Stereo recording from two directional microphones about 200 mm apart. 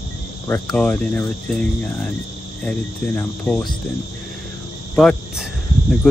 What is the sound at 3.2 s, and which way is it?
Speech, 5° left (ahead or behind).